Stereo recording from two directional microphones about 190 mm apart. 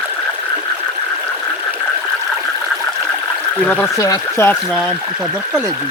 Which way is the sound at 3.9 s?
15° left (ahead or behind).